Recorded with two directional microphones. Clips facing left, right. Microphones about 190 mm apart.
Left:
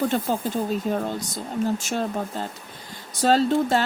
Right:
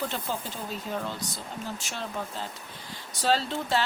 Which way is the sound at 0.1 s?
50° left (ahead or behind).